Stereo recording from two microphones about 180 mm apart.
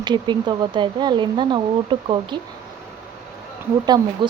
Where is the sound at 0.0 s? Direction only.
25° right (ahead or behind).